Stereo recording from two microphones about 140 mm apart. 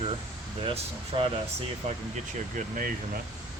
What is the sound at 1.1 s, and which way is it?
Speech, 45° right (ahead or behind).